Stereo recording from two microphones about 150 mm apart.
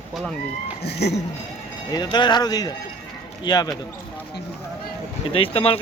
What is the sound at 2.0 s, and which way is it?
Speech, 30° left (ahead or behind).